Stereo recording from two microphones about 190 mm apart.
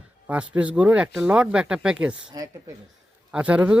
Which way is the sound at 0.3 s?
5° right (ahead or behind).